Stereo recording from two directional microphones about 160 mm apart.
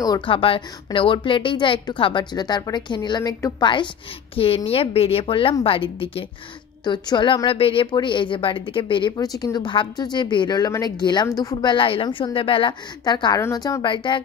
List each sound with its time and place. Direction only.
0.0 s a woman's voice: 30° left (ahead or behind)